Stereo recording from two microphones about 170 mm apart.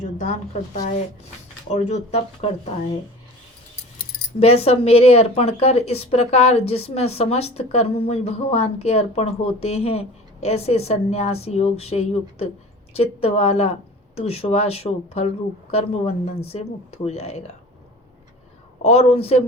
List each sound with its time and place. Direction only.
0.0 s a woman's voice: 45° left (ahead or behind)
4.4 s speech: 35° left (ahead or behind)
18.8 s speech: 35° left (ahead or behind)